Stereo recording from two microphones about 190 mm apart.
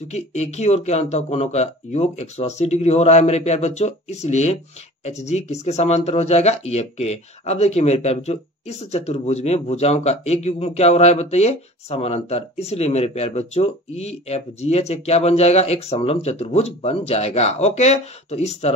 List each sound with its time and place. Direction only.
0.1 s speech: 35° left (ahead or behind)